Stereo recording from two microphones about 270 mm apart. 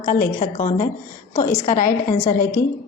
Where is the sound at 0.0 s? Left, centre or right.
Left.